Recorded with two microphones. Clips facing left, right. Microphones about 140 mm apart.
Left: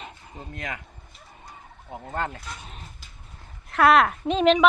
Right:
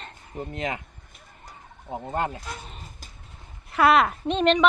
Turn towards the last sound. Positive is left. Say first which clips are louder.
# left 2 dB
turn(degrees=0)  # may be behind; listen again after turning